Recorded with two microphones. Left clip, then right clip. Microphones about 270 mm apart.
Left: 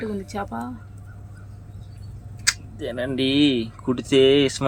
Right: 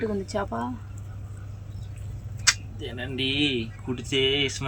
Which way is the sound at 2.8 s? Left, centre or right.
Centre.